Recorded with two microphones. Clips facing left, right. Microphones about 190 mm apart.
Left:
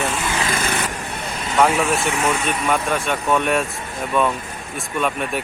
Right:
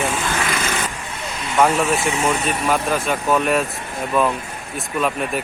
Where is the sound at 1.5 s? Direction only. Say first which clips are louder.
Even; centre (ahead or behind).